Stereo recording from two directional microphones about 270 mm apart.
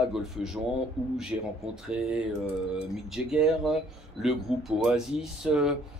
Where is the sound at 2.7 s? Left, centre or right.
Centre.